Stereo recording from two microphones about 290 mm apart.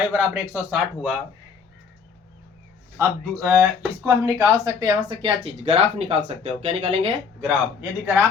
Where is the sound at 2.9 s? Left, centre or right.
Centre.